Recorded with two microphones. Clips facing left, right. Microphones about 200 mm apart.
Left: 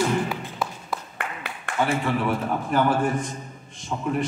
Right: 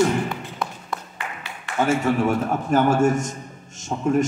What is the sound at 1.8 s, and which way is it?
A man's voice, 45° right (ahead or behind).